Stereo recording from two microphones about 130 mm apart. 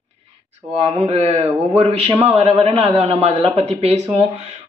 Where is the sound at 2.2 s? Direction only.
50° right (ahead or behind).